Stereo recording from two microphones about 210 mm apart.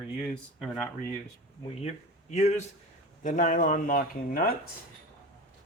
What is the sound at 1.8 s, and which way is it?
Speech, 30° left (ahead or behind).